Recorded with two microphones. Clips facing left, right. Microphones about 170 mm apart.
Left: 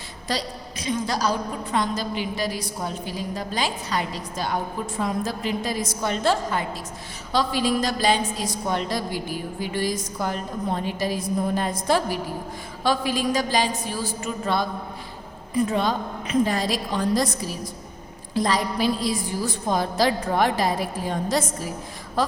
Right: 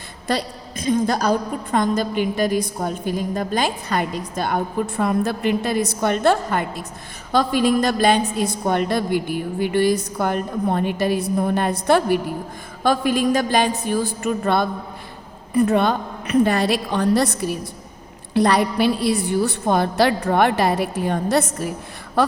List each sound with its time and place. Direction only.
0.3 s a woman's voice: 55° right (ahead or behind)